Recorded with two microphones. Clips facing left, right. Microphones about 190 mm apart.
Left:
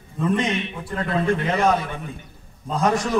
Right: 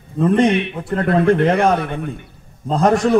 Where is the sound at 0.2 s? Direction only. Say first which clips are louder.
Right 8 dB; 65° right (ahead or behind).